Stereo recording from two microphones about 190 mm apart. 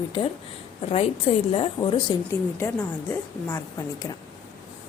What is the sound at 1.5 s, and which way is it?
Speech, 30° left (ahead or behind).